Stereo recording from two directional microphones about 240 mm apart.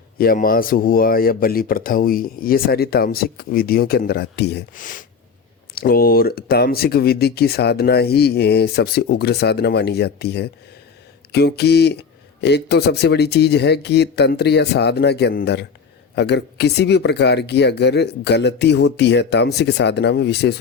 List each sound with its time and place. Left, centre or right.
0.2 s speech: left